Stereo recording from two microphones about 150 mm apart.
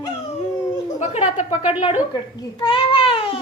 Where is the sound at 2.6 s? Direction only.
35° left (ahead or behind).